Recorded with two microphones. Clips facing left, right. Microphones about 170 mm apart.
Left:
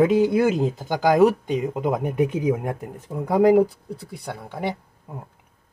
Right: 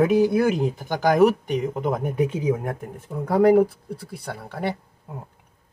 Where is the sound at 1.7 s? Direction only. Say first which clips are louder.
Left 1 dB; 15° left (ahead or behind).